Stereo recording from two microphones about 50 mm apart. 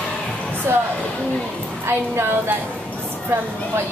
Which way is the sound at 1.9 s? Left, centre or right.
Right.